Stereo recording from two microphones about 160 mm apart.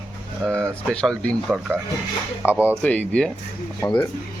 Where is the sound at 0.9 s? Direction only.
5° left (ahead or behind).